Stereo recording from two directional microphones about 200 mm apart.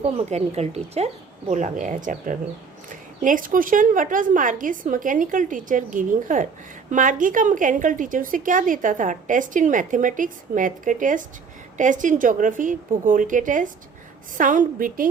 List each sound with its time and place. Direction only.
0.0 s a woman's voice: 35° right (ahead or behind)